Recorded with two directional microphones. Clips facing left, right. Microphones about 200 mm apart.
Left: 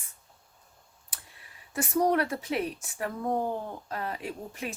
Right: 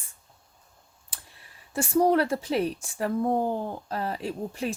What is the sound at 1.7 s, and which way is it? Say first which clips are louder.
Speech: right 4 dB; 30° right (ahead or behind).